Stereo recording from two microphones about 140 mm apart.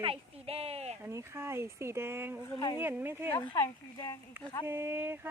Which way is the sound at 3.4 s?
35° left (ahead or behind).